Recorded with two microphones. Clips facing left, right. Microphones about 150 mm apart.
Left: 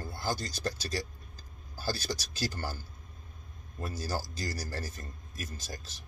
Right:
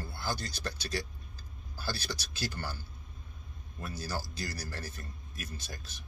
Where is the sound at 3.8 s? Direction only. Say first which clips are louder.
Left 3 dB; 40° left (ahead or behind).